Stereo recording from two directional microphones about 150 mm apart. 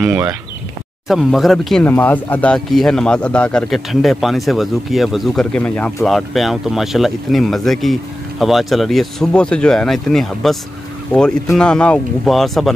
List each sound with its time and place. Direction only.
0.0 s speech: 15° right (ahead or behind)
1.0 s speech: centre (ahead or behind)
1.9 s speech: 10° left (ahead or behind)